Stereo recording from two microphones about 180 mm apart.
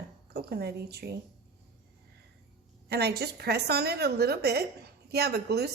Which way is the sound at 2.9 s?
65° right (ahead or behind).